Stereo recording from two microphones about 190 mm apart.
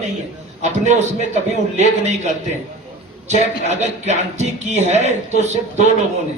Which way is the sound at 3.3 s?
35° right (ahead or behind).